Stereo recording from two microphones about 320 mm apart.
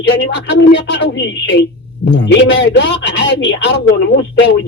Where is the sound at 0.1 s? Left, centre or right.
Left.